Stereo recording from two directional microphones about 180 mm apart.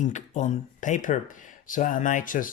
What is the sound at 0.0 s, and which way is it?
A woman's voice, 40° left (ahead or behind).